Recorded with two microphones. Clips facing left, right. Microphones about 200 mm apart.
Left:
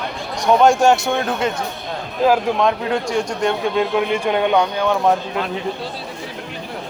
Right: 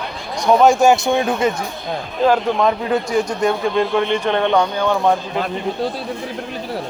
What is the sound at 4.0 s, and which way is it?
Speech, 10° left (ahead or behind).